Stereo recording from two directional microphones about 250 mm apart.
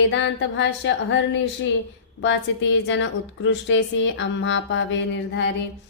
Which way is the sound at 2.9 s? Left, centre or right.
Left.